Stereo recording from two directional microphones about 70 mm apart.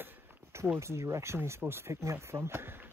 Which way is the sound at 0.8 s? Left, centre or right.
Right.